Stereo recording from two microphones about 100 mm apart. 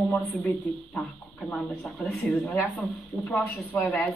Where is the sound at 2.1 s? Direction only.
Centre (ahead or behind).